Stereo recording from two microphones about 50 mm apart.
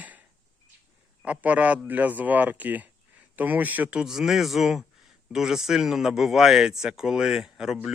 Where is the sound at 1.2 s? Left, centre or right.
Right.